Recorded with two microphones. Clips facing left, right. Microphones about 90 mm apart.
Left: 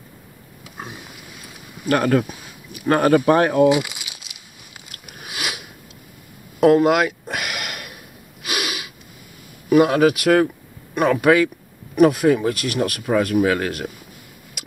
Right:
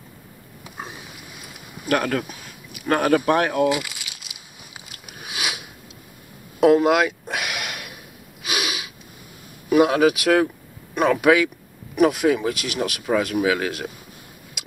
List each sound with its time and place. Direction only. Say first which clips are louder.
1.9 s speech: left 4 dB; 5° left (ahead or behind)
3.6 s speech: left 5 dB; 20° left (ahead or behind)
4.3 s biting: right 1 dB; 15° right (ahead or behind)
5.3 s sniff: even; 5° right (ahead or behind)
6.6 s a sound: left 1 dB; 5° right (ahead or behind)
8.5 s snort: left 1 dB; 5° right (ahead or behind)
9.7 s speech: left 2 dB; 10° right (ahead or behind)
13.0 s speech: left 2 dB; 5° left (ahead or behind)